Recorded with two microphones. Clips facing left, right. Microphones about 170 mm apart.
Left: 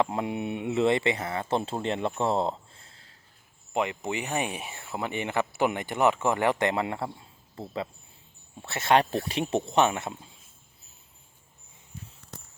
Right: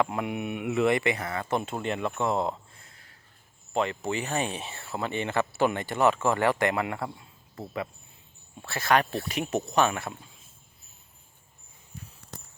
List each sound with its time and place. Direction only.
0.0 s speech: 25° left (ahead or behind)
8.6 s speech: 25° left (ahead or behind)